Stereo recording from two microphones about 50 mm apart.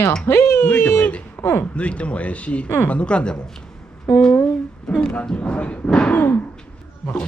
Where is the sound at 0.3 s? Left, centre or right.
Left.